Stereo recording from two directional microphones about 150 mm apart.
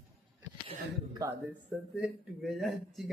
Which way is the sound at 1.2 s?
25° right (ahead or behind).